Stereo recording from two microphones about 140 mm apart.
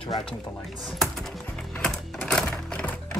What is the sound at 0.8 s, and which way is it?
Music, centre (ahead or behind).